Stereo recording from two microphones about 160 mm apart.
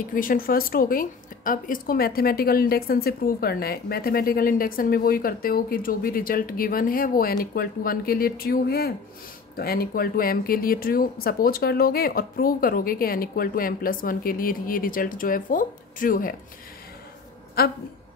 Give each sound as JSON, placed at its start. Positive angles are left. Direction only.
{"t": 0.0, "sound": "a woman's voice", "side_deg": 60}
{"t": 17.6, "sound": "a woman's voice", "side_deg": 75}